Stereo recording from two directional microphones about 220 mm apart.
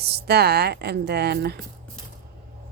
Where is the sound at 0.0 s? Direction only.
45° right (ahead or behind).